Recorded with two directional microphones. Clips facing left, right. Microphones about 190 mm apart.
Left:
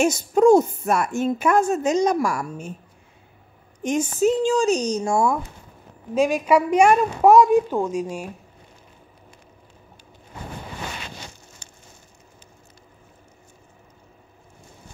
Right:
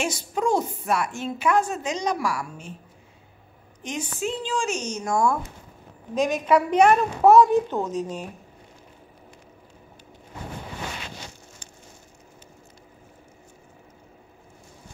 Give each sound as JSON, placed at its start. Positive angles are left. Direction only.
{"t": 0.0, "sound": "a woman's voice", "side_deg": 45}
{"t": 3.8, "sound": "speech", "side_deg": 45}
{"t": 6.1, "sound": "a woman's voice", "side_deg": 10}